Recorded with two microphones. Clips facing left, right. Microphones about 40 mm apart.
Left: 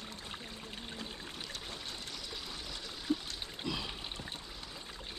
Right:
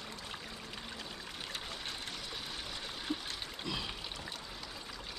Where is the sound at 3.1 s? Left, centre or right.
Right.